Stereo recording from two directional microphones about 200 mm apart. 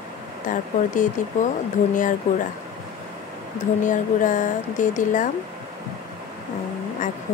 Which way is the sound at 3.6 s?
40° left (ahead or behind).